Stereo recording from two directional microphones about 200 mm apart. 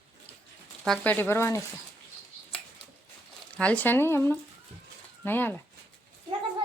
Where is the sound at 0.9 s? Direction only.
10° left (ahead or behind).